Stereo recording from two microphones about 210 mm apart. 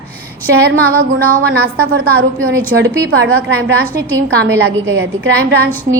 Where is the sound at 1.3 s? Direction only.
45° right (ahead or behind).